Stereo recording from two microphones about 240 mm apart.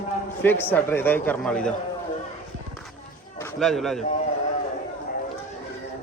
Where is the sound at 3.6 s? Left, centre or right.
Centre.